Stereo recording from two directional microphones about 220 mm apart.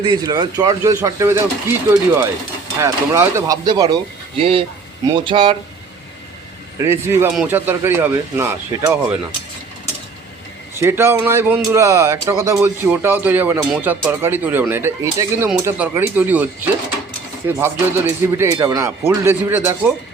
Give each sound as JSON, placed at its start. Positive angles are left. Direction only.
{"t": 0.0, "sound": "speech", "side_deg": -20}
{"t": 6.7, "sound": "speech", "side_deg": -10}
{"t": 10.8, "sound": "speech", "side_deg": -10}
{"t": 17.6, "sound": "speech", "side_deg": -10}